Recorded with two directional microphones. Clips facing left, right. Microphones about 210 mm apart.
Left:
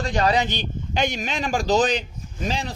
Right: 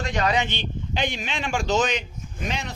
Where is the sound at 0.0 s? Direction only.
35° left (ahead or behind).